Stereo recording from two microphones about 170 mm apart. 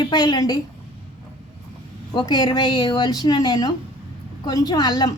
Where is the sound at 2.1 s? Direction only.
25° left (ahead or behind).